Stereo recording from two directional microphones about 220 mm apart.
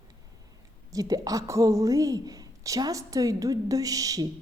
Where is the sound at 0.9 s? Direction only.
15° right (ahead or behind).